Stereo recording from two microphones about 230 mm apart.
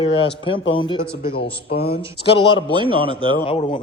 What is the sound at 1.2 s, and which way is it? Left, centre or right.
Speech, left.